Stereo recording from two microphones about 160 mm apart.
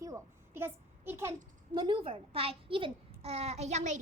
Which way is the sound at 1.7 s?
30° right (ahead or behind).